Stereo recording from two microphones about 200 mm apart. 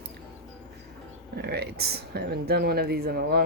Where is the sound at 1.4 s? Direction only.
55° right (ahead or behind).